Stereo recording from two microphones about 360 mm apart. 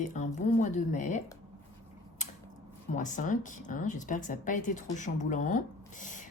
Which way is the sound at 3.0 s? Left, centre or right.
Left.